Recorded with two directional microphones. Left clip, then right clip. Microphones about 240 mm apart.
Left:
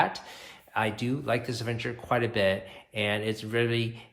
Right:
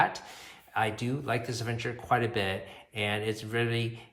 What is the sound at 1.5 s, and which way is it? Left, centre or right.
Speech, centre.